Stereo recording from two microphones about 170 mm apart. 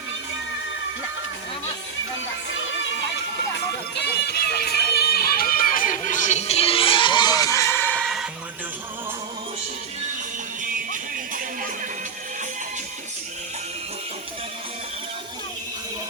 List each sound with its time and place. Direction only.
4.0 s music: 70° left (ahead or behind); by 8.0 s 10° left (ahead or behind)
8.0 s a sound: 5° right (ahead or behind)
10.7 s music: 50° right (ahead or behind)